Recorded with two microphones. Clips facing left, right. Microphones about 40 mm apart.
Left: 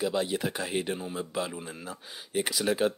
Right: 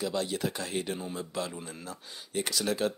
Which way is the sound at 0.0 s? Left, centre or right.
Centre.